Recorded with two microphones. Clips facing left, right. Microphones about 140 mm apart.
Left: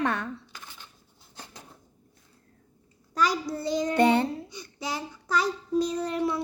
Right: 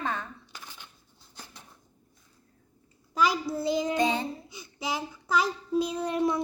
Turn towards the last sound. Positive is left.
turn(degrees=-20)  # may be behind; listen again after turning